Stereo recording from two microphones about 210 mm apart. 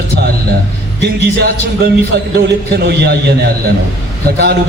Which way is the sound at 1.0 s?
50° right (ahead or behind).